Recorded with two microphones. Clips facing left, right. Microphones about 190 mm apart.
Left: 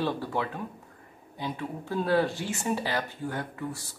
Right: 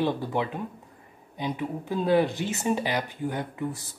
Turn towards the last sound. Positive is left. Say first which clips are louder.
# right 4 dB
turn(degrees=-20)  # may be behind; listen again after turning